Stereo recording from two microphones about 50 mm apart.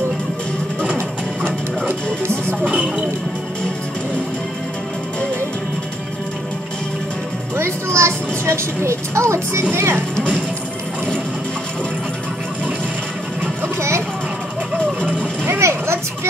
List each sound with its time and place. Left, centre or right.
2.6 s speech: right
7.5 s speech: right
9.6 s speech: right
13.7 s music: right
15.0 s vehicle: right